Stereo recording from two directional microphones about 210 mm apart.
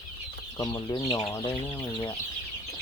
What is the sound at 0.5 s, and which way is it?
Chicken, 15° left (ahead or behind).